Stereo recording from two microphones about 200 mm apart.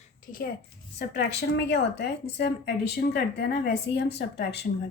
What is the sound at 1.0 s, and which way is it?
A woman's voice, 55° left (ahead or behind).